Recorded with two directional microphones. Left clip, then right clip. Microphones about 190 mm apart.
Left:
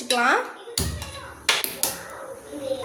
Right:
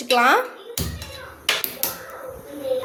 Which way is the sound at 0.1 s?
25° right (ahead or behind).